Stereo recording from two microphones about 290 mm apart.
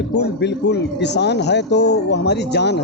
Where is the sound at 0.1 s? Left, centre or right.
Left.